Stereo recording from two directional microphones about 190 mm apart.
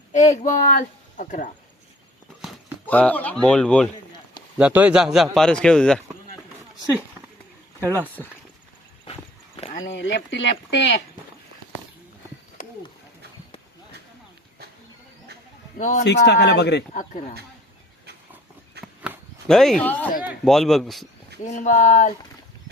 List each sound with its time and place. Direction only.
0.1 s speech: 40° left (ahead or behind)
2.8 s a man's voice: 10° left (ahead or behind)
4.5 s a man's voice: 5° right (ahead or behind)
7.8 s speech: 10° left (ahead or behind)
9.6 s a sound: 30° left (ahead or behind)
9.8 s speech: 70° left (ahead or behind)
12.6 s a sound: 45° left (ahead or behind)
15.8 s speech: 45° left (ahead or behind)
16.0 s speech: 70° left (ahead or behind)
16.9 s speech: 40° left (ahead or behind)
18.8 s a sound: 55° right (ahead or behind)
19.5 s a man's voice: centre (ahead or behind)
21.4 s speech: 40° left (ahead or behind)